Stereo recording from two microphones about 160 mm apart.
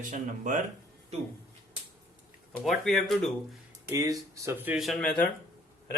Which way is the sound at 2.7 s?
Centre (ahead or behind).